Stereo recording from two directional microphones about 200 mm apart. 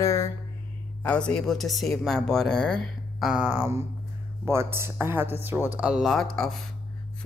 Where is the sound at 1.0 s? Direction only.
5° left (ahead or behind).